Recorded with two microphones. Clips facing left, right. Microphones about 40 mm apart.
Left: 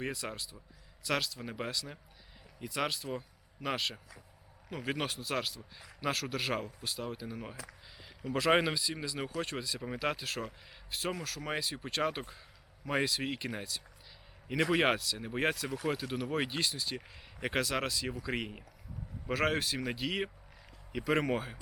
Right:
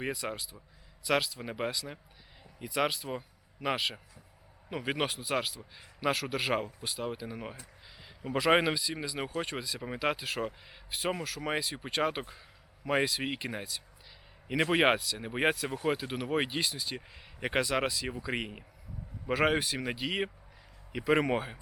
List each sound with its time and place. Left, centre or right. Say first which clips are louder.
0.1 s a man's voice: right 4 dB; centre
15.2 s speech: right 3 dB; centre